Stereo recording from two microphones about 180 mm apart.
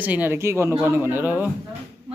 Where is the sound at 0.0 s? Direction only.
10° right (ahead or behind).